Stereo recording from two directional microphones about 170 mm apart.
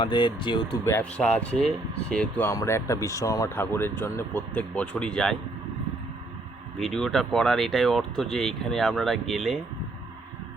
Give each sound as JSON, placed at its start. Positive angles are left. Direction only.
{"t": 0.0, "sound": "speech", "side_deg": 30}
{"t": 0.9, "sound": "speech", "side_deg": 10}
{"t": 2.5, "sound": "speech", "side_deg": 15}
{"t": 6.7, "sound": "speech", "side_deg": 0}